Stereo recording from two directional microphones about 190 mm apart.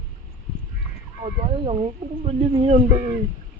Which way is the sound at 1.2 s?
30° right (ahead or behind).